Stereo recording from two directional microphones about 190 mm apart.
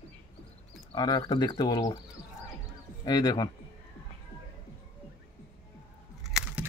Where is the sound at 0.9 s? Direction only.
20° left (ahead or behind).